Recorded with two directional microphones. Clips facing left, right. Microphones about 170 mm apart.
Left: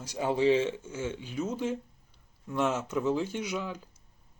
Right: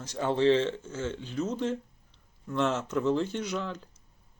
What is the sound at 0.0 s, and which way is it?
Speech, 10° left (ahead or behind).